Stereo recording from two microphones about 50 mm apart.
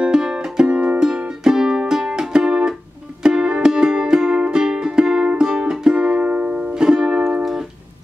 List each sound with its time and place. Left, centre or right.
0.0 s music: centre
6.7 s music: centre